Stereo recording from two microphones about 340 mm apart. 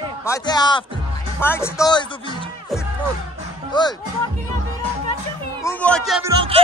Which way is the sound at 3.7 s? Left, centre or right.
Centre.